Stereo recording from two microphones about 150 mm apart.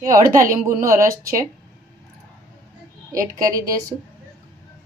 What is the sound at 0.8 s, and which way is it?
Speech, 20° right (ahead or behind).